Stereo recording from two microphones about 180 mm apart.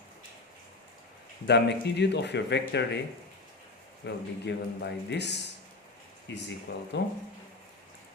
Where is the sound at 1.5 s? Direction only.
70° left (ahead or behind).